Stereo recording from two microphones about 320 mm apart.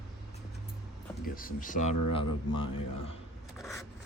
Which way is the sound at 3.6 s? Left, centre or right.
Centre.